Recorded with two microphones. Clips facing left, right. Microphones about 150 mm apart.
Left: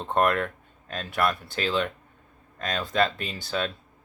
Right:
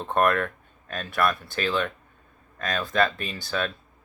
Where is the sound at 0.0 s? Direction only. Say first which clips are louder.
Right 1 dB; 25° left (ahead or behind).